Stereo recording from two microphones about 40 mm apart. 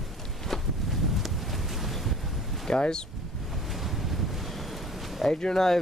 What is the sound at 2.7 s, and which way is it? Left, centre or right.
Speech, left.